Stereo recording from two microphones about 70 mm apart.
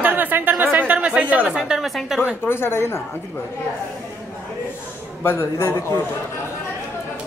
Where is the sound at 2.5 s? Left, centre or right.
Left.